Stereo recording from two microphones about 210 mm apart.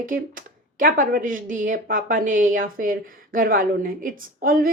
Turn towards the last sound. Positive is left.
turn(degrees=-40)  # may be behind; listen again after turning